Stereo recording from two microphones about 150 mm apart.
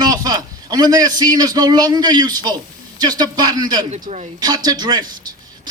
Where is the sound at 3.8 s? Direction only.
50° right (ahead or behind).